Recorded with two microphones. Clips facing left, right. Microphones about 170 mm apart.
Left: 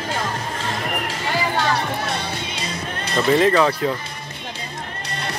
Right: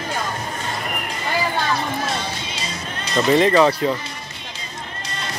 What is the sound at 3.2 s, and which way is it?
Speech, centre (ahead or behind).